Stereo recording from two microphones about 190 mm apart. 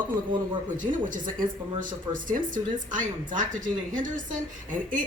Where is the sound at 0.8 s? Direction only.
45° right (ahead or behind).